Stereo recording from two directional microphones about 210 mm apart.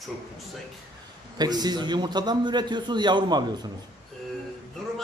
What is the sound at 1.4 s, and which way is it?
A man's voice, 20° right (ahead or behind).